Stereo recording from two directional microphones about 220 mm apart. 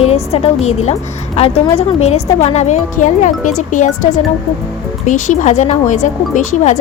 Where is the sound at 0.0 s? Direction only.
25° left (ahead or behind).